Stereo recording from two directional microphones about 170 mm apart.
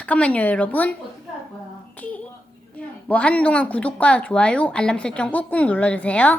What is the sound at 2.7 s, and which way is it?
A woman's voice, 10° left (ahead or behind).